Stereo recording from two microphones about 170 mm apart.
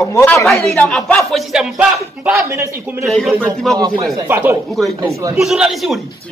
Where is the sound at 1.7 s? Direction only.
15° right (ahead or behind).